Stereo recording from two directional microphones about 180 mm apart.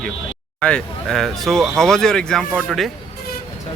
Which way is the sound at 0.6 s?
5° left (ahead or behind).